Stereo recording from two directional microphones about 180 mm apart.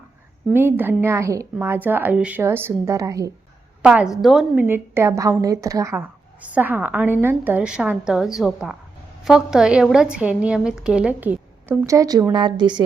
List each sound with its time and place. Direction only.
0.5 s a woman's voice: 10° right (ahead or behind)
3.8 s a woman's voice: 5° right (ahead or behind)
4.5 s a woman's voice: 10° right (ahead or behind)